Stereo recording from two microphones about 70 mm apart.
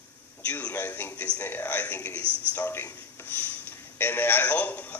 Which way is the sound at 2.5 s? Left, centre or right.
Left.